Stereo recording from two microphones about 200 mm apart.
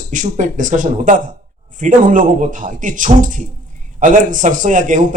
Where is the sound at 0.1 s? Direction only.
40° right (ahead or behind).